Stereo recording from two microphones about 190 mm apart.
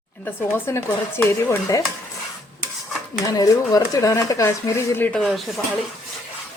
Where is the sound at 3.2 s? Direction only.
20° left (ahead or behind); by 5.6 s centre (ahead or behind).